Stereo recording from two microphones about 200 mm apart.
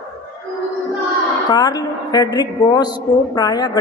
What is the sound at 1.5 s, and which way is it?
A woman's voice, 20° left (ahead or behind).